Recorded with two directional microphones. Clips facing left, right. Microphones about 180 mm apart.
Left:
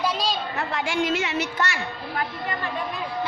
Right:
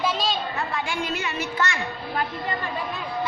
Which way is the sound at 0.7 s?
85° left.